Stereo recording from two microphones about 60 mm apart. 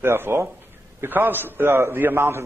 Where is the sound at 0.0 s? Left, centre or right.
Right.